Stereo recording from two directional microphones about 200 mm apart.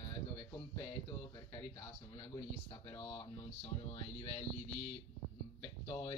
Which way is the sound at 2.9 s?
15° left (ahead or behind).